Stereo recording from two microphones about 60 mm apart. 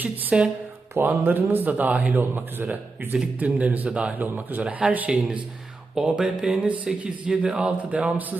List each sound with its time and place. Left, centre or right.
0.0 s a man's voice: right
3.8 s speech: centre
4.2 s a man's voice: right